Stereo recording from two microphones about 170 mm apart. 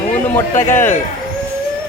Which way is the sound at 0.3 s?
15° left (ahead or behind).